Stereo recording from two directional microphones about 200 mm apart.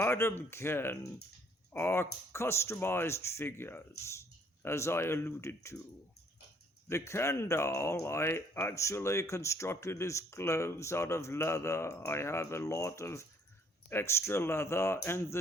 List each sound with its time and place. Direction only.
0.0 s speech: 15° left (ahead or behind)
6.8 s speech: 15° left (ahead or behind)